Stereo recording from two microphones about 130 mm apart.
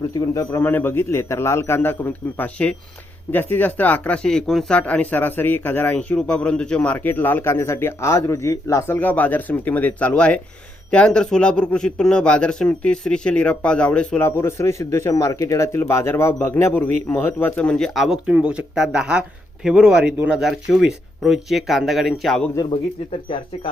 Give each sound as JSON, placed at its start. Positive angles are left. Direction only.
{"t": 0.1, "sound": "speech", "side_deg": 25}
{"t": 14.3, "sound": "speech", "side_deg": 20}